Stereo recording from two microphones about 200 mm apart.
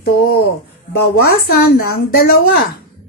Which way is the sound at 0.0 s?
50° left (ahead or behind).